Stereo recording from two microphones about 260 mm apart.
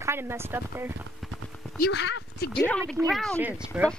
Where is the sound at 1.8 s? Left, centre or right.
Left.